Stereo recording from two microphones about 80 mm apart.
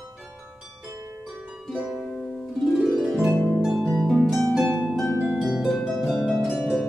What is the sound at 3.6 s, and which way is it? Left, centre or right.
Harp, centre.